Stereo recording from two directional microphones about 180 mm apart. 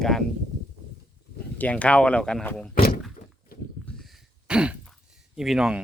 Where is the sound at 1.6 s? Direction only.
10° left (ahead or behind).